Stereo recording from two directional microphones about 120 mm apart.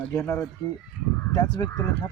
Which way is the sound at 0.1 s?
20° left (ahead or behind).